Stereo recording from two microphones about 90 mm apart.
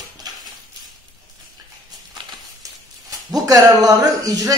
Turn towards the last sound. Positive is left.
turn(degrees=-45)  # may be behind; listen again after turning